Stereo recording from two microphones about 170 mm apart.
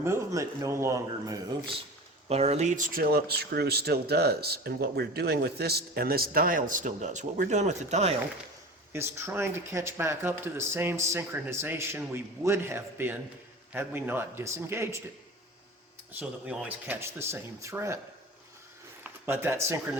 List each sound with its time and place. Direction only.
0.0 s speech: 15° right (ahead or behind)
2.3 s speech: 40° right (ahead or behind)
8.9 s speech: 15° right (ahead or behind)
16.1 s speech: 10° right (ahead or behind)
19.0 s speech: 10° right (ahead or behind)